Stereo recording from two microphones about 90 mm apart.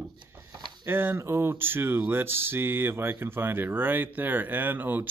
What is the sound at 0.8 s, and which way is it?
Speech, 25° right (ahead or behind).